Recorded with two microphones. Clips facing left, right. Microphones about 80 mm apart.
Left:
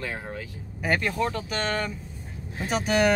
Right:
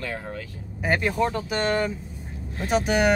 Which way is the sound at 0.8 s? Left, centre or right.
Centre.